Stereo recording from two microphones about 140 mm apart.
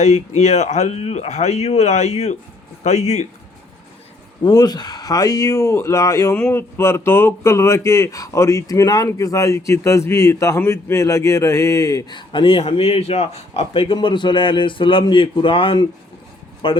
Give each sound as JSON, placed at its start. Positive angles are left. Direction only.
{"t": 0.0, "sound": "speech", "side_deg": 50}
{"t": 4.4, "sound": "speech", "side_deg": 30}
{"t": 6.3, "sound": "speech", "side_deg": 15}